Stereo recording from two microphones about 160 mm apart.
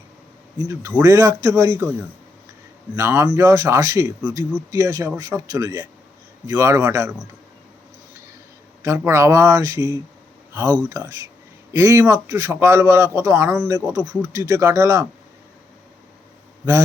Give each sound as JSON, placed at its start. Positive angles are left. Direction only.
{"t": 0.7, "sound": "speech", "side_deg": -20}
{"t": 2.9, "sound": "speech", "side_deg": -15}
{"t": 8.8, "sound": "speech", "side_deg": -15}